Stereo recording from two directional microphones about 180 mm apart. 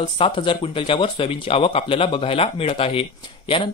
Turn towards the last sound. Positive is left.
turn(degrees=30)  # may be behind; listen again after turning